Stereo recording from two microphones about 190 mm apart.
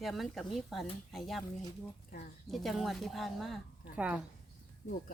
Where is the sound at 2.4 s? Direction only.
Centre (ahead or behind).